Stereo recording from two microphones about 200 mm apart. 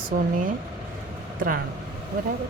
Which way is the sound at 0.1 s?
40° right (ahead or behind).